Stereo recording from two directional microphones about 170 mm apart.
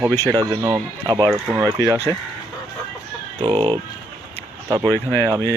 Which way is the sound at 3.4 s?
25° right (ahead or behind).